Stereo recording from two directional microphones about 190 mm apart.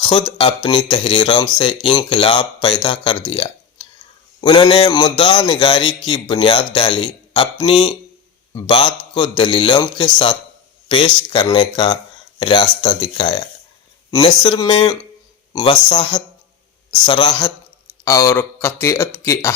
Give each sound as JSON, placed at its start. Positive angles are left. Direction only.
{"t": 0.0, "sound": "a man's voice", "side_deg": 25}